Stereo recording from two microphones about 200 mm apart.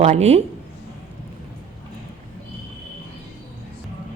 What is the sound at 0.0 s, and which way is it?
Speech, 30° right (ahead or behind).